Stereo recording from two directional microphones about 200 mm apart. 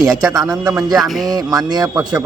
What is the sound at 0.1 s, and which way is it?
Speech, centre (ahead or behind).